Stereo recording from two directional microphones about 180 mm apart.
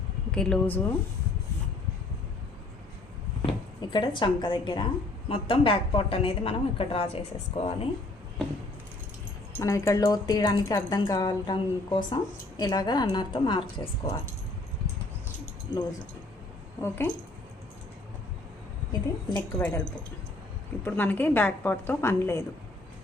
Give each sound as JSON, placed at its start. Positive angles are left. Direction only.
{"t": 0.3, "sound": "speech", "side_deg": 5}
{"t": 3.4, "sound": "a woman's voice", "side_deg": 25}
{"t": 9.5, "sound": "a woman's voice", "side_deg": 15}
{"t": 16.8, "sound": "a woman's voice", "side_deg": 10}
{"t": 18.9, "sound": "a woman's voice", "side_deg": 20}